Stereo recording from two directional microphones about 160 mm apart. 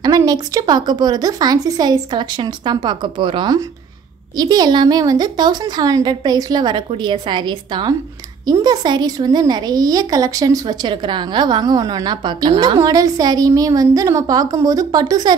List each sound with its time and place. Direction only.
0.0 s a woman's voice: 25° right (ahead or behind)